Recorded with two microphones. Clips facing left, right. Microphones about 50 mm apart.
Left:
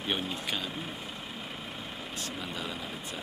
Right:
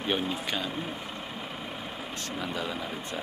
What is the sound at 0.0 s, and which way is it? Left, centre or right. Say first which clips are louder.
Speech: right 4 dB; centre.